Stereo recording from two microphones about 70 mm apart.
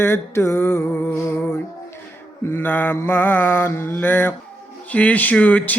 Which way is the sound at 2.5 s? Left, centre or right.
Left.